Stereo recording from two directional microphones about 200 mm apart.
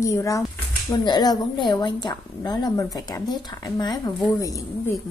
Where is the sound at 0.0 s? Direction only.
15° left (ahead or behind).